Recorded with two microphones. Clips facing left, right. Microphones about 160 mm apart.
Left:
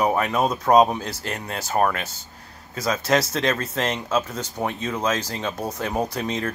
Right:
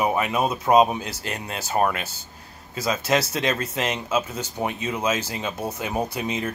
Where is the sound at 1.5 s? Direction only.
20° right (ahead or behind).